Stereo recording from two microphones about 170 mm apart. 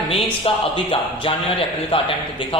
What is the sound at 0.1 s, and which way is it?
Speech, 35° left (ahead or behind).